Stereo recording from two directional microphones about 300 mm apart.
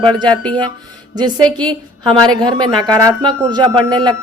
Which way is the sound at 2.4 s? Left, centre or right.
Centre.